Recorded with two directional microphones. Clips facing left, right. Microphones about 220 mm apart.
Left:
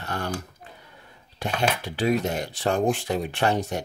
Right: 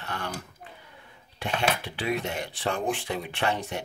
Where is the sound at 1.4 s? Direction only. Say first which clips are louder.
Left 2 dB; 40° left (ahead or behind).